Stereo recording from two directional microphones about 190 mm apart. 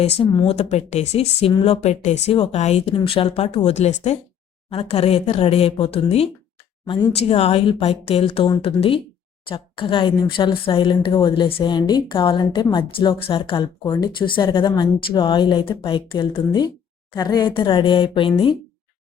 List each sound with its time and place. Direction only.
0.0 s speech: 30° left (ahead or behind)